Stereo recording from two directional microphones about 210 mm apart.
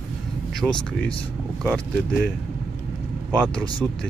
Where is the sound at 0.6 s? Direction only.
10° right (ahead or behind).